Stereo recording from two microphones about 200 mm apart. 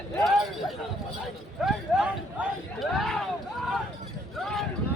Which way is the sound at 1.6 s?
5° right (ahead or behind).